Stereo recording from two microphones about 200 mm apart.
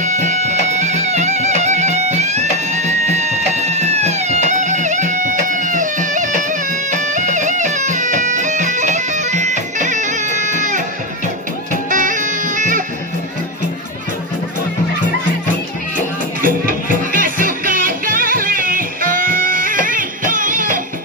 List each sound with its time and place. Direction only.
0.0 s music: 35° right (ahead or behind)
16.3 s music: 45° right (ahead or behind)